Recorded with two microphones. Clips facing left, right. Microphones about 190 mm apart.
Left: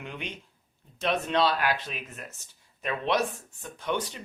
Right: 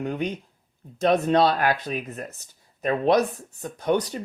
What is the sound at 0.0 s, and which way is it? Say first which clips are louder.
Speech: right 11 dB; 40° right (ahead or behind).